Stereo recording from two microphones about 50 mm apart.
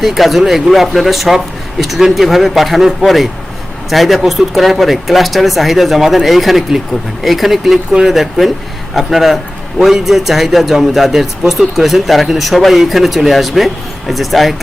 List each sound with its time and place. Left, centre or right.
0.0 s a man's voice: centre